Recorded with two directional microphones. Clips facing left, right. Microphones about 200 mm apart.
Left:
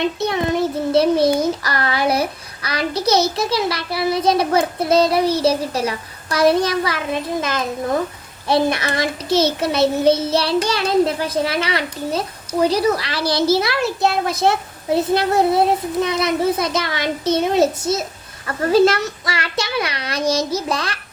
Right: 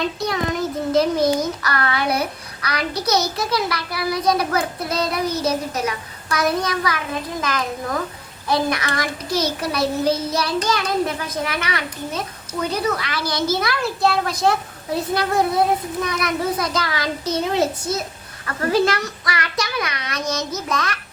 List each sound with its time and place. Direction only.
0.2 s child singing: 25° left (ahead or behind)
10.7 s a child's voice: 30° left (ahead or behind)
12.6 s child singing: 35° left (ahead or behind)
19.2 s a child's voice: 30° left (ahead or behind)